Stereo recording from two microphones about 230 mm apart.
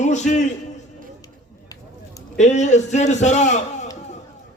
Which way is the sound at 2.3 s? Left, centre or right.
Left.